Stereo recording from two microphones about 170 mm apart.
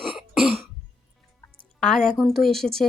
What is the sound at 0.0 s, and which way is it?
Cough, centre (ahead or behind).